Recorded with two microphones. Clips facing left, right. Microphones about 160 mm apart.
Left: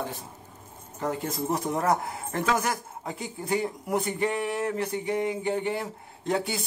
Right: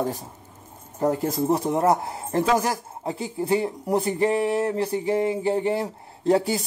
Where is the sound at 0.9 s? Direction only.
40° right (ahead or behind).